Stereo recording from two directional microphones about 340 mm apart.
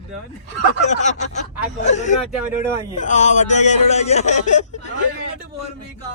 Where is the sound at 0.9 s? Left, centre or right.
Left.